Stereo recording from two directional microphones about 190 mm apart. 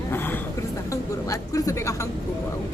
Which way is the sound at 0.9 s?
15° left (ahead or behind).